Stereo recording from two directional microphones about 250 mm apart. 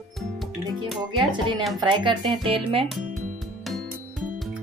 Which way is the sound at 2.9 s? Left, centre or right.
Centre.